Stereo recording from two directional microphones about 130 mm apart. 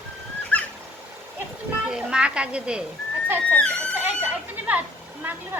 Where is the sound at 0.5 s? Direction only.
10° left (ahead or behind).